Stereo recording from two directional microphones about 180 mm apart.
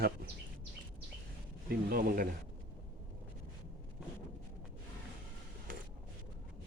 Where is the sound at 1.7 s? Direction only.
55° right (ahead or behind).